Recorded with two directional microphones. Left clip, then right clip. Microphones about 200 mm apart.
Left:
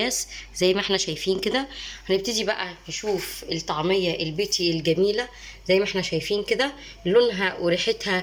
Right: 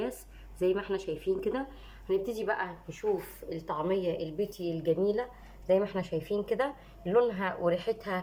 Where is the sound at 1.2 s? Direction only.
20° left (ahead or behind).